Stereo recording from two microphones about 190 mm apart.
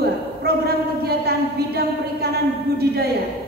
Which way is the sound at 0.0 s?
55° right (ahead or behind).